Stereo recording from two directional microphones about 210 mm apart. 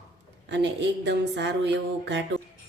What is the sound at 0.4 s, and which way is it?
Speech, 55° right (ahead or behind).